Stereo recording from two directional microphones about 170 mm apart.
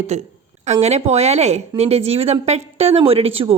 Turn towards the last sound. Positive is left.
turn(degrees=-35)  # may be behind; listen again after turning